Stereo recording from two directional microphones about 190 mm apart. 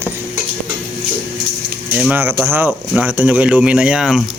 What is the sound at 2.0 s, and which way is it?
Speech, 10° right (ahead or behind).